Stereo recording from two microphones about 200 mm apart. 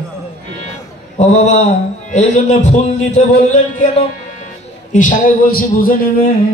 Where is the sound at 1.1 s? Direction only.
35° left (ahead or behind).